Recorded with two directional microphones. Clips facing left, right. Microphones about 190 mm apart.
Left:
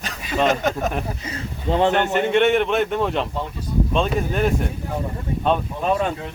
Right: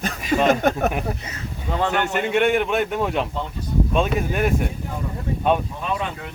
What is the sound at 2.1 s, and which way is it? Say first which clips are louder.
A man's voice: even; 5° right (ahead or behind).